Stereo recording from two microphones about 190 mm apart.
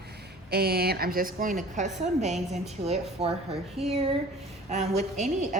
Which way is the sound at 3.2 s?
30° right (ahead or behind).